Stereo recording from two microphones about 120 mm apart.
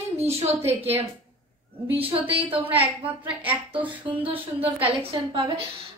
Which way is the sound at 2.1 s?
50° right (ahead or behind).